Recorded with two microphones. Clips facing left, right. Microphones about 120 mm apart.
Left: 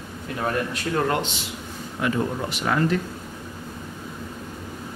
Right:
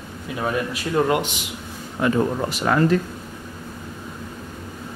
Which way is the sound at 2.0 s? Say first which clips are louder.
Right 4 dB; 40° right (ahead or behind).